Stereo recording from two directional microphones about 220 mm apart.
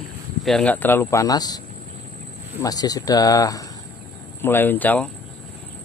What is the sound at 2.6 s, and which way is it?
Speech, 15° left (ahead or behind).